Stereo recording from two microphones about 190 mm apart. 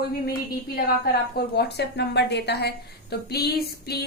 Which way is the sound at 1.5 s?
60° left (ahead or behind).